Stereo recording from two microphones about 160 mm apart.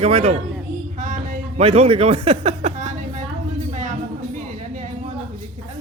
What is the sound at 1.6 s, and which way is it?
Speech, 40° right (ahead or behind).